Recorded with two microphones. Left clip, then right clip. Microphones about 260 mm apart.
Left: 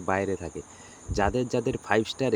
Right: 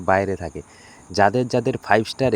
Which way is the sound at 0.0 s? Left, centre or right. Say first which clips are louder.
Right 8 dB; centre.